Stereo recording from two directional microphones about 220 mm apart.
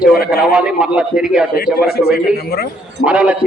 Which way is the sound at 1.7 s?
45° left (ahead or behind).